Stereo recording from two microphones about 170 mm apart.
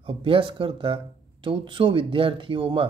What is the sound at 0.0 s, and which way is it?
Speech, 30° right (ahead or behind).